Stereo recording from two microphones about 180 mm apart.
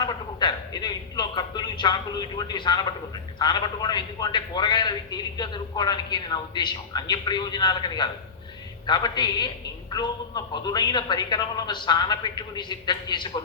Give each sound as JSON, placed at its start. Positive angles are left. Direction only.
{"t": 0.0, "sound": "a man's voice", "side_deg": 25}